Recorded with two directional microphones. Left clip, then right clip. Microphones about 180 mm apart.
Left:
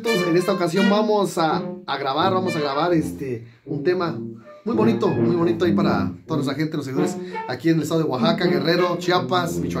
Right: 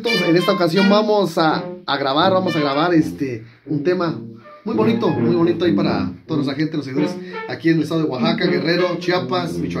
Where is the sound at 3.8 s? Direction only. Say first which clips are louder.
Right 2 dB; 60° right (ahead or behind).